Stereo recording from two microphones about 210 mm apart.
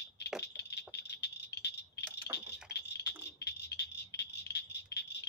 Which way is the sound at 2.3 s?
50° left (ahead or behind).